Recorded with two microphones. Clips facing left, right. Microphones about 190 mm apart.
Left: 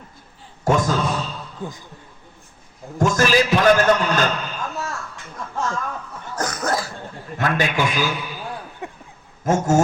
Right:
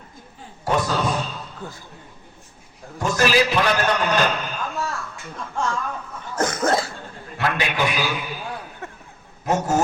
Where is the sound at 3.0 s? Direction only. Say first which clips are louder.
Left 2 dB; 45° left (ahead or behind).